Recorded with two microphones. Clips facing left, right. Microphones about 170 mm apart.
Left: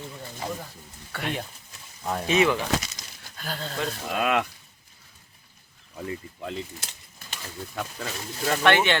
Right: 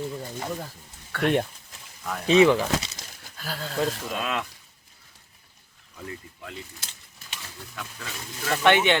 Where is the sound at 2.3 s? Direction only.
30° right (ahead or behind).